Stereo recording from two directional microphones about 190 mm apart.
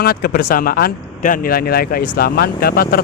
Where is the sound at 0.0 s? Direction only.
55° left (ahead or behind).